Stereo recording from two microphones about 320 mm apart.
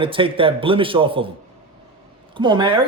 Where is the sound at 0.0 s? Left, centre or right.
Centre.